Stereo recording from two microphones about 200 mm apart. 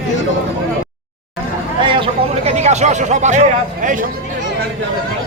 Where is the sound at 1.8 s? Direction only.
25° right (ahead or behind).